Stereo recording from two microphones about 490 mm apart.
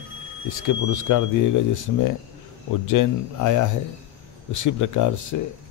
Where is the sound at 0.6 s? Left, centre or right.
Left.